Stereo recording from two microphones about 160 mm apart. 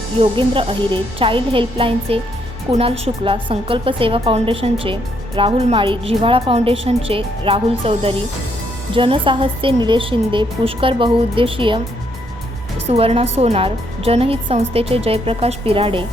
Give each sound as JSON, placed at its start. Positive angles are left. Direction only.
{"t": 0.2, "sound": "a woman's voice", "side_deg": -35}
{"t": 12.9, "sound": "a woman's voice", "side_deg": -40}